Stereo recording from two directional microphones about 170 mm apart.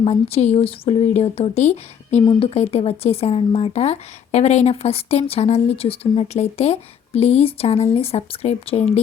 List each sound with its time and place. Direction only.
0.0 s speech: 35° left (ahead or behind)